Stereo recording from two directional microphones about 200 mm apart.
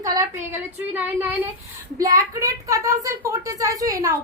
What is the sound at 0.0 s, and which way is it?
Speech, 15° right (ahead or behind).